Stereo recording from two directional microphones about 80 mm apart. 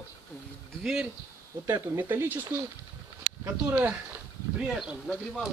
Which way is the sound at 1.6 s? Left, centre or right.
Right.